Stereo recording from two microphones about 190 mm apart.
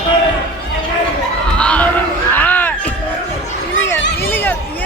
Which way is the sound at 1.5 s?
5° left (ahead or behind).